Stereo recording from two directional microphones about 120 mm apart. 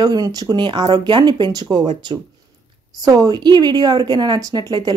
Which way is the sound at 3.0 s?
30° right (ahead or behind).